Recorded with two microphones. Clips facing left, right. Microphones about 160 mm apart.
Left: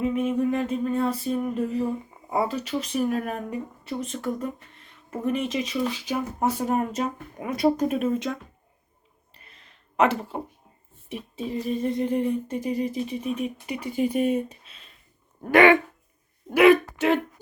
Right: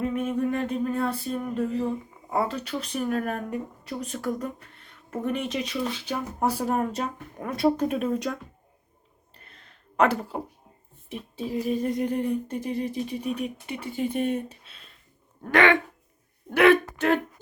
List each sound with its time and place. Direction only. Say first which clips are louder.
0.0 s speech: left 2 dB; 5° left (ahead or behind)
9.6 s a sound: left 1 dB; centre (ahead or behind)
11.1 s speech: even; centre (ahead or behind)
15.4 s speech: left 4 dB; 15° left (ahead or behind)